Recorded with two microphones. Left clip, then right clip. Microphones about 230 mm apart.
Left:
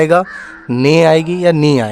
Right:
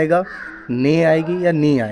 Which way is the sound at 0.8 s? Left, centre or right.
Left.